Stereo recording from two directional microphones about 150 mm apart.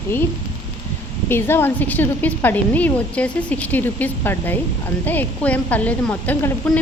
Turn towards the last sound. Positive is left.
turn(degrees=10)  # may be behind; listen again after turning